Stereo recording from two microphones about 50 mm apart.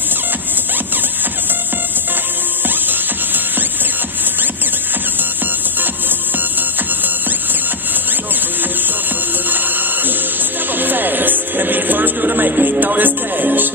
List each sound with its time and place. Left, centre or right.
10.8 s music: right